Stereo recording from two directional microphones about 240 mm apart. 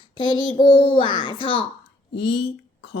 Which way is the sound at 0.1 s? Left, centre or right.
Centre.